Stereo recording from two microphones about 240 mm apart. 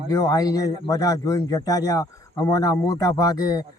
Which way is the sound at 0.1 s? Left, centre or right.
Centre.